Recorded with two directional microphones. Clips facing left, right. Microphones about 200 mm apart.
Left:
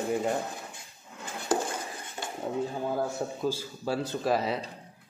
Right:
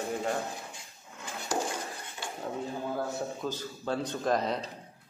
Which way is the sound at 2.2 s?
45° left (ahead or behind).